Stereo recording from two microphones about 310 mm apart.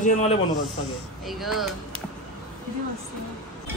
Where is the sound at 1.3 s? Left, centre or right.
Centre.